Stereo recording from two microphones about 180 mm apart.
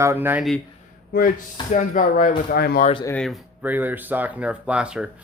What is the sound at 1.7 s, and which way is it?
Speech, 45° left (ahead or behind).